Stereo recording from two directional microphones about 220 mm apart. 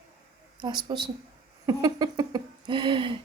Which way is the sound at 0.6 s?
20° right (ahead or behind).